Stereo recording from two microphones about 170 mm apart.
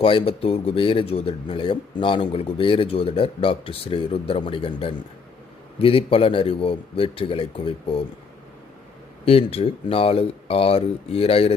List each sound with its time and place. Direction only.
0.0 s speech: 30° left (ahead or behind)
9.2 s speech: 35° left (ahead or behind)